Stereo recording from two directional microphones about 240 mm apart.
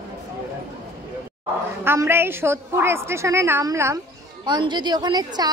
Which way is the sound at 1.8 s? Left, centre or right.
Centre.